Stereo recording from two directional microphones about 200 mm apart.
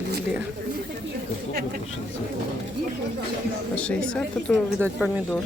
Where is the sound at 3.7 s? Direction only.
5° left (ahead or behind).